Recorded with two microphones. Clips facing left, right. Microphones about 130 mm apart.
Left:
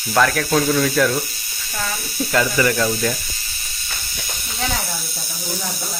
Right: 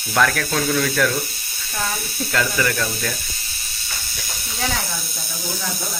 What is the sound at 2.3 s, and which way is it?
Speech, 15° left (ahead or behind).